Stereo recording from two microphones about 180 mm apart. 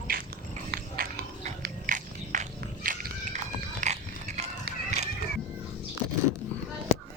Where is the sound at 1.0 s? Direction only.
55° right (ahead or behind).